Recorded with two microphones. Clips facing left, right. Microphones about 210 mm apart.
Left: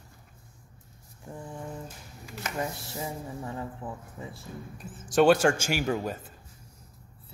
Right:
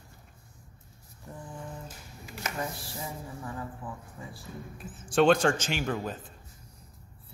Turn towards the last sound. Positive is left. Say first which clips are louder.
# left 3 dB
turn(degrees=10)  # may be behind; listen again after turning